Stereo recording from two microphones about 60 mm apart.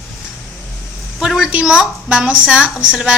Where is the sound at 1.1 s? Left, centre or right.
Centre.